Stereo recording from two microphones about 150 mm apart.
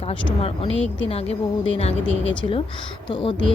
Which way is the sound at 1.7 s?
40° left (ahead or behind).